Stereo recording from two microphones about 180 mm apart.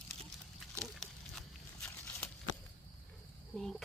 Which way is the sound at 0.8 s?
5° left (ahead or behind).